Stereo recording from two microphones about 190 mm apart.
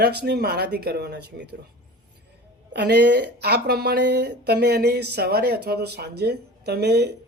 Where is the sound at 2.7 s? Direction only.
60° right (ahead or behind).